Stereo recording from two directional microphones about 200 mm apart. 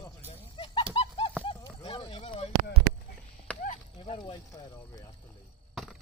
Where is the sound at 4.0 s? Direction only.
25° left (ahead or behind).